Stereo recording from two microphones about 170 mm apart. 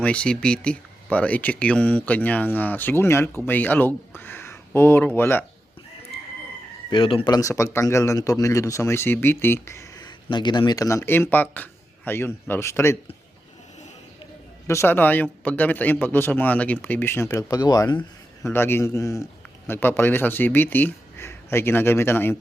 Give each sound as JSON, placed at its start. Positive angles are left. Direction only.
{"t": 0.0, "sound": "speech", "side_deg": 5}
{"t": 6.9, "sound": "speech", "side_deg": 30}
{"t": 14.7, "sound": "speech", "side_deg": 15}